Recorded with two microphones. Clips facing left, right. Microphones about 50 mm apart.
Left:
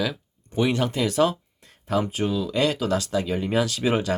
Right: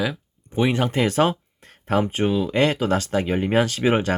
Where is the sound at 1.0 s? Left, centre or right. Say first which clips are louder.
Right 2 dB; right.